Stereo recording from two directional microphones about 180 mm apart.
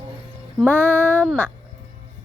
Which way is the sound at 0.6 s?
10° left (ahead or behind).